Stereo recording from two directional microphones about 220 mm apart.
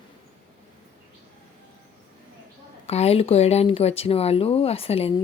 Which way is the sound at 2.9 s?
30° left (ahead or behind).